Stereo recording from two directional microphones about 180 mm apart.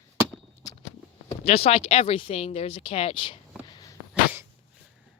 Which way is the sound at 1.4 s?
35° left (ahead or behind).